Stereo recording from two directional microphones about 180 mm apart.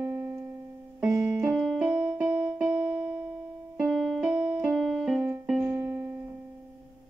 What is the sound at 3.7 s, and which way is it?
Keyboard, 5° right (ahead or behind).